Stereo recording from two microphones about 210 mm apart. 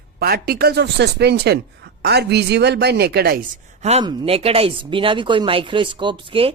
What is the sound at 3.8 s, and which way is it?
Speech, 25° right (ahead or behind).